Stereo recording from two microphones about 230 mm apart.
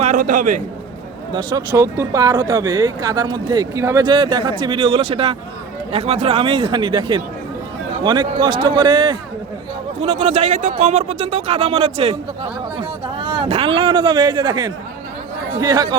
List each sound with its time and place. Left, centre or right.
0.0 s a man's voice: right
1.3 s speech: centre
13.1 s speech: centre